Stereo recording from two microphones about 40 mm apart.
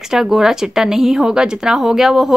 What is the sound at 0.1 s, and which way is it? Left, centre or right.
A woman's voice, centre.